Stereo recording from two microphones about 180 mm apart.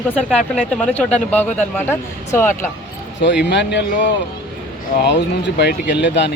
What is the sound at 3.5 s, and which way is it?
Speech, 70° left (ahead or behind).